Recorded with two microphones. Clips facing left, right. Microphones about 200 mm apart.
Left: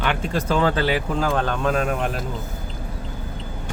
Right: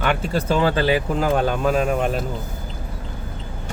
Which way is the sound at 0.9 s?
10° right (ahead or behind).